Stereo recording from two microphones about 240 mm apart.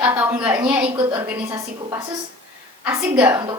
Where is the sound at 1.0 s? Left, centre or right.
Centre.